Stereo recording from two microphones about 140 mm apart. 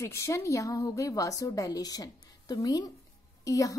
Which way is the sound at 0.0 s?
20° left (ahead or behind).